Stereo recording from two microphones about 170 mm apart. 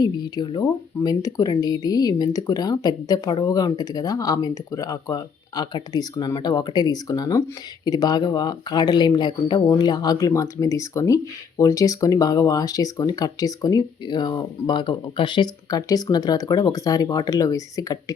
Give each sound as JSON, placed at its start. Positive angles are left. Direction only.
{"t": 0.0, "sound": "speech", "side_deg": 25}